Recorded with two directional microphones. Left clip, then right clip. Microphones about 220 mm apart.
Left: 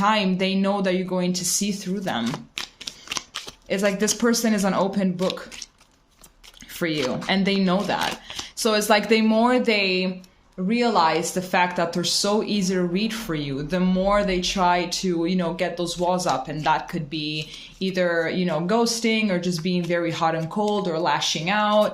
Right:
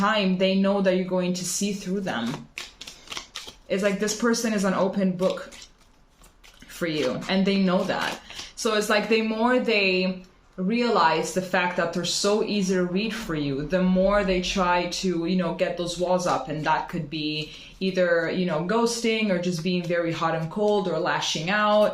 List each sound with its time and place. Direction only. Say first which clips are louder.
0.0 s speech: left 1 dB; 50° left (ahead or behind)
3.1 s a sound: left 5 dB; 35° left (ahead or behind)
3.7 s speech: left 2 dB; 50° left (ahead or behind)
6.7 s speech: left 1 dB; 50° left (ahead or behind)